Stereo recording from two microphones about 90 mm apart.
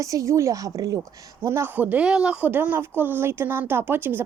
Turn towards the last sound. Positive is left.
turn(degrees=-25)  # may be behind; listen again after turning